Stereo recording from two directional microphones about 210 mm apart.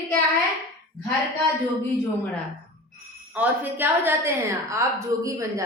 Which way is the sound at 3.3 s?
10° right (ahead or behind).